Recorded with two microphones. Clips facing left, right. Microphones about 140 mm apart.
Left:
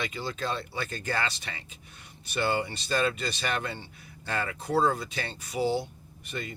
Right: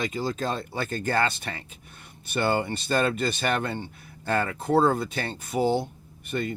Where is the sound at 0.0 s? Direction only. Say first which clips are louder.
Right 5 dB; 40° right (ahead or behind).